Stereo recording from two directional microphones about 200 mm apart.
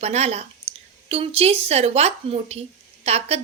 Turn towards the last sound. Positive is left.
turn(degrees=-30)  # may be behind; listen again after turning